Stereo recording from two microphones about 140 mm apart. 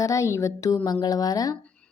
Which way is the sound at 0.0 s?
20° left (ahead or behind).